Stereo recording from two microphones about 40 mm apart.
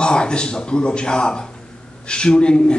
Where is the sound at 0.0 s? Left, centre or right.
Left.